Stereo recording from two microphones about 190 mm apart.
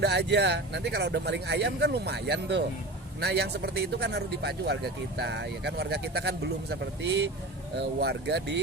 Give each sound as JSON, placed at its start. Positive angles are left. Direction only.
{"t": 0.0, "sound": "speech", "side_deg": -60}